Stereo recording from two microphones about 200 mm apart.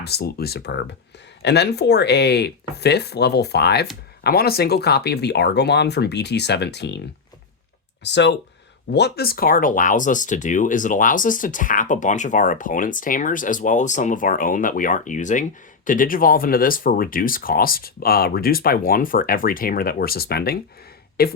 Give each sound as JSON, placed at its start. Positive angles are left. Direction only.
{"t": 0.0, "sound": "speech", "side_deg": 55}
{"t": 8.0, "sound": "speech", "side_deg": 60}